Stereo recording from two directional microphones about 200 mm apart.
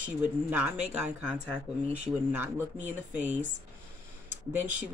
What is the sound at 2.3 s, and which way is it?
Speech, 10° right (ahead or behind).